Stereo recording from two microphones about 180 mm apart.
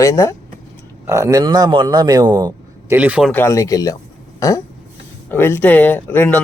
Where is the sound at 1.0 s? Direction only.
15° right (ahead or behind).